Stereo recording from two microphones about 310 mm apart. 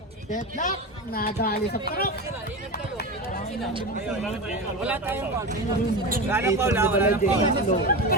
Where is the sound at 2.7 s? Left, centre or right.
Left.